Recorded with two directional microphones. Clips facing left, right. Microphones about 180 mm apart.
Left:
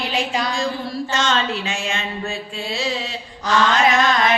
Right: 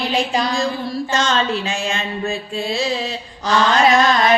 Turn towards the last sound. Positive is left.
turn(degrees=-35)  # may be behind; listen again after turning